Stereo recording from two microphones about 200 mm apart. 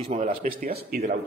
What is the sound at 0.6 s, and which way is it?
Speech, 50° right (ahead or behind).